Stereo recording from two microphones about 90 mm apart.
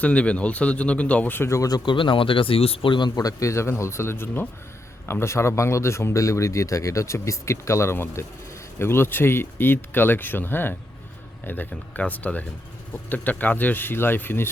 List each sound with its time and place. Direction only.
0.0 s speech: 15° left (ahead or behind); by 1.8 s 40° left (ahead or behind)
1.8 s speech: 65° left (ahead or behind)
3.2 s speech: 40° left (ahead or behind)